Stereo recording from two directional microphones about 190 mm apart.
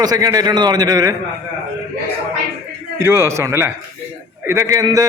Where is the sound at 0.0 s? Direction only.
20° right (ahead or behind).